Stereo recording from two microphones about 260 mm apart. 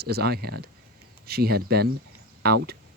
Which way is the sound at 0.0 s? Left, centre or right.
Right.